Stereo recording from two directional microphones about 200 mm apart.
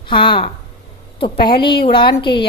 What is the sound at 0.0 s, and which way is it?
A woman's voice, 25° left (ahead or behind).